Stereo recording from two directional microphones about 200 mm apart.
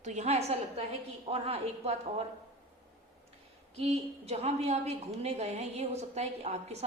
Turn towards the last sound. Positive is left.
turn(degrees=-30)  # may be behind; listen again after turning